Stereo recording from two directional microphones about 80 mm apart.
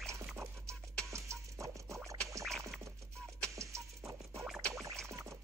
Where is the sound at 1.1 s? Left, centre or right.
Right.